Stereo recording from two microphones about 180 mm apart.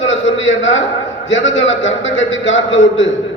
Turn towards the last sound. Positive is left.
turn(degrees=90)